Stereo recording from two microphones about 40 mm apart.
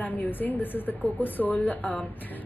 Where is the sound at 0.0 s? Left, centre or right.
Left.